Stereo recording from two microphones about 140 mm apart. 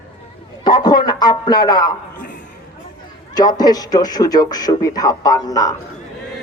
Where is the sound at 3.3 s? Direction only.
30° left (ahead or behind).